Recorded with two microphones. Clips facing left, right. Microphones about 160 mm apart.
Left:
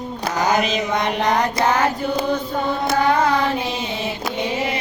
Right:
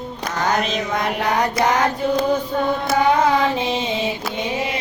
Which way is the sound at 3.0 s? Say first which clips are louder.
Right 2 dB; 20° right (ahead or behind).